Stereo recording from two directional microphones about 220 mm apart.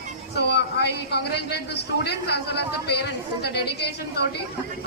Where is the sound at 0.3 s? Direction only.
50° left (ahead or behind).